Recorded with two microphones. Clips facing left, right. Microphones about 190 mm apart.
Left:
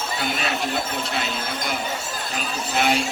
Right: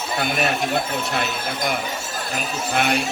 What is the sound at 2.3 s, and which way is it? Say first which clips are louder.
Speech: right 2 dB; 55° right (ahead or behind).